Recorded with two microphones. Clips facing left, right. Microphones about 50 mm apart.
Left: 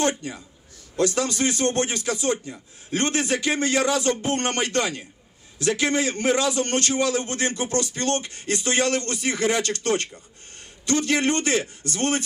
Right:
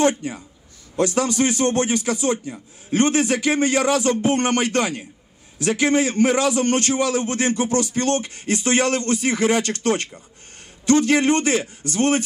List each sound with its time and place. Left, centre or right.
0.9 s a man's voice: right
7.9 s a sound: right
8.6 s a man's voice: right